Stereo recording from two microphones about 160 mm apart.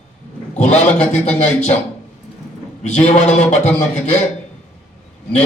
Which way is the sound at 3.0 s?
50° left (ahead or behind).